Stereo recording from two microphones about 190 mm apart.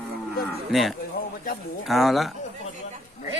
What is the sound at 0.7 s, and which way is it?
Speech, centre (ahead or behind).